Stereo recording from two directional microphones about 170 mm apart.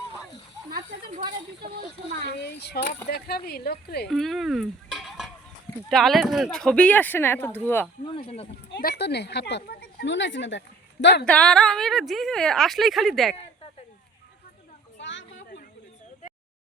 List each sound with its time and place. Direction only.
2.2 s speech: 80° left
3.1 s speech: 65° left (ahead or behind)
4.1 s speech: centre (ahead or behind)
8.7 s speech: 70° left (ahead or behind); by 11.3 s 90° left
11.3 s a woman's voice: 5° left (ahead or behind)
14.9 s a sound: 90° left